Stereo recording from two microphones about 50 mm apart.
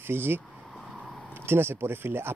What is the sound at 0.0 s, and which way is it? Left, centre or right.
Speech, right.